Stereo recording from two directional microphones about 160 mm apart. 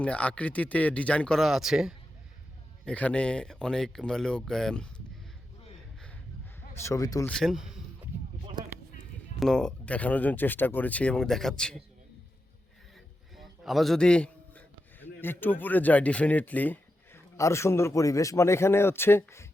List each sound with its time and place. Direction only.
0.0 s speech: 10° left (ahead or behind)
2.8 s speech: 10° left (ahead or behind)
6.8 s speech: 20° left (ahead or behind)
7.3 s speech: centre (ahead or behind)
9.4 s speech: 5° left (ahead or behind)
13.3 s a sound: centre (ahead or behind)
15.2 s speech: 10° left (ahead or behind)